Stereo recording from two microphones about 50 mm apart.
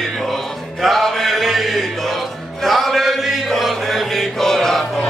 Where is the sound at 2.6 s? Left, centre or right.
Centre.